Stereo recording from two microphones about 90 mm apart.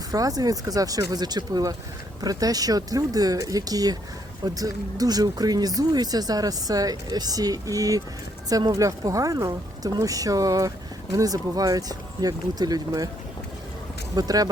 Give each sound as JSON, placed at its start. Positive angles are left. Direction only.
{"t": 0.1, "sound": "speech", "side_deg": -45}
{"t": 14.2, "sound": "speech", "side_deg": -45}